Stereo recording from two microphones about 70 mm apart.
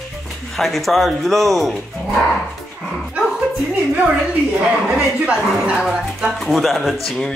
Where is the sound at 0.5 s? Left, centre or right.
Centre.